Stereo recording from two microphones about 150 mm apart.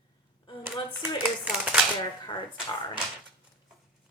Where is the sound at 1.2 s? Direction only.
5° right (ahead or behind).